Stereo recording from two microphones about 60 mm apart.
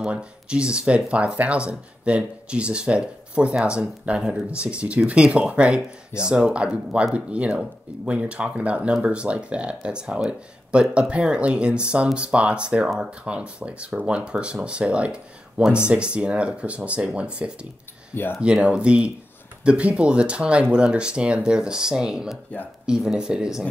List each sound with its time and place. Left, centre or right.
0.0 s speech: centre
18.1 s speech: left
18.4 s speech: centre